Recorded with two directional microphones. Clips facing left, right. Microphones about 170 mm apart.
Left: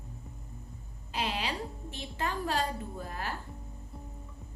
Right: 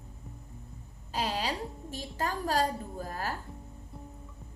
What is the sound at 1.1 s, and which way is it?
A woman's voice, 40° right (ahead or behind).